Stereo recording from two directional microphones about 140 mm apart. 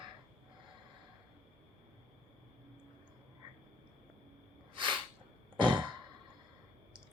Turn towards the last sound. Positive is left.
turn(degrees=-35)  # may be behind; listen again after turning